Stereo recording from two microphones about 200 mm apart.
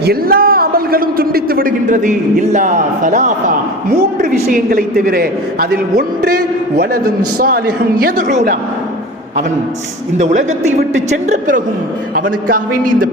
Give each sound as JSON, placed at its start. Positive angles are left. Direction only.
{"t": 0.0, "sound": "a man's voice", "side_deg": -50}
{"t": 7.3, "sound": "a man's voice", "side_deg": -45}
{"t": 10.2, "sound": "a man's voice", "side_deg": -35}